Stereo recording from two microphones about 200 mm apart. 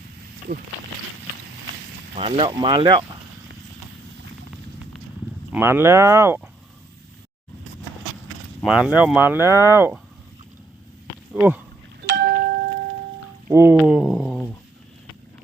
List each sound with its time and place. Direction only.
0.5 s speech: 45° right (ahead or behind)
2.1 s speech: 30° right (ahead or behind)
5.5 s speech: 10° right (ahead or behind)
8.6 s speech: 5° right (ahead or behind)
11.3 s speech: 10° right (ahead or behind)
12.0 s a sound: 60° right (ahead or behind)
13.5 s speech: 10° right (ahead or behind); by 14.5 s 5° left (ahead or behind)